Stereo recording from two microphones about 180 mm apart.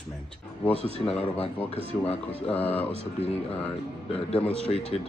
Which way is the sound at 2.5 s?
10° left (ahead or behind).